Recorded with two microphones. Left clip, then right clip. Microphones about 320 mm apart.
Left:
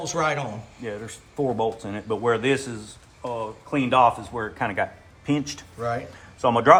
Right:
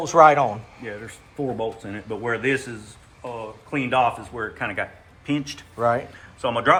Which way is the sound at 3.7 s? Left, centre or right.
Left.